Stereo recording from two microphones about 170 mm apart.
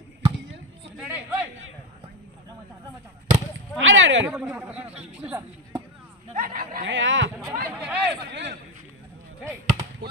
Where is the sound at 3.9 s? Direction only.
90° right.